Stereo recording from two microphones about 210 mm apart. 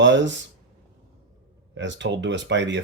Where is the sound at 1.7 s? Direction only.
60° right (ahead or behind).